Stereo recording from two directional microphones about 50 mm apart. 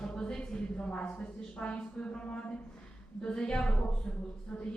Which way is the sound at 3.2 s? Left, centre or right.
Centre.